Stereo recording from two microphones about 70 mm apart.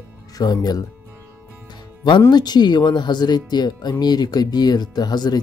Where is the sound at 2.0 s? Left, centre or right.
Left.